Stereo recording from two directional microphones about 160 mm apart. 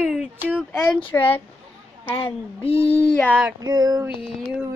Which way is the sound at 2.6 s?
35° left (ahead or behind).